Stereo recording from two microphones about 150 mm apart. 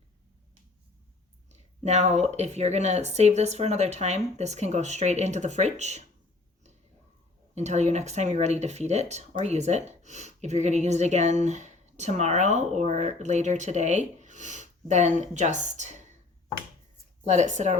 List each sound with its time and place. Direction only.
1.5 s a woman's voice: 50° right (ahead or behind)
7.5 s a woman's voice: 50° right (ahead or behind)
17.2 s a woman's voice: 50° right (ahead or behind)